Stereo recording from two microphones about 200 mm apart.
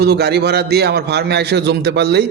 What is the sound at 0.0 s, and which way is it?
A man's voice, 55° right (ahead or behind).